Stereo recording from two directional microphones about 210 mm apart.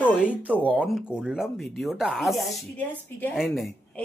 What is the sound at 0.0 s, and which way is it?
Speech, 5° right (ahead or behind).